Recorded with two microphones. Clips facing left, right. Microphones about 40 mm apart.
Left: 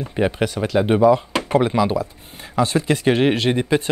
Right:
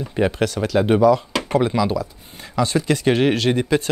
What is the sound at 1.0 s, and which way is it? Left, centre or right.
Speech, left.